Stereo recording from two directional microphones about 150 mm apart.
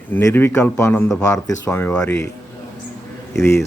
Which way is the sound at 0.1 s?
15° left (ahead or behind).